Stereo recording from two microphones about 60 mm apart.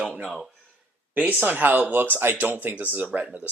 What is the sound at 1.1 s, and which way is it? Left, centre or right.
Speech, right.